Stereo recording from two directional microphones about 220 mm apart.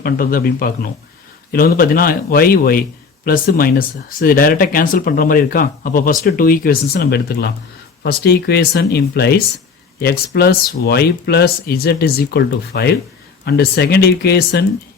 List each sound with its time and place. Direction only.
0.0 s speech: 40° left (ahead or behind)